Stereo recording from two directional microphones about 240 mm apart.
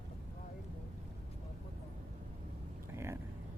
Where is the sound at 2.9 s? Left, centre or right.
Centre.